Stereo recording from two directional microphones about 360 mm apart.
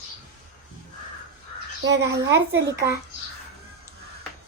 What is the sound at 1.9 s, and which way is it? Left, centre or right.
Speech, right.